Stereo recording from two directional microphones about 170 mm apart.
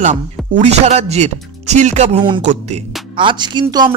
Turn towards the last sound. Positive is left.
turn(degrees=-25)  # may be behind; listen again after turning